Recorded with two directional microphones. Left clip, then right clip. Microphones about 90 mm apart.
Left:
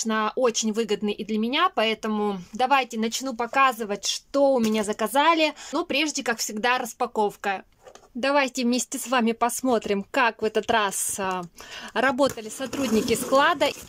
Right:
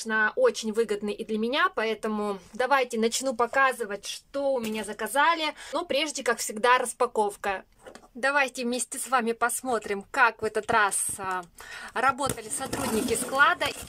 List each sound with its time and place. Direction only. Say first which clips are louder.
0.0 s speech: even; 30° left (ahead or behind)
2.0 s speech: left 3 dB; centre (ahead or behind)
2.5 s speech: left 2 dB; 15° left (ahead or behind)
3.0 s speech: right 2 dB; 10° right (ahead or behind)
3.9 s speech: left 7 dB; 55° left (ahead or behind); by 4.8 s 85° left
4.8 s speech: left 1 dB; 40° left (ahead or behind)
5.5 s speech: left 2 dB; 10° left (ahead or behind)
8.2 s a woman's voice: left 2 dB; 15° left (ahead or behind); by 13.7 s 45° left (ahead or behind)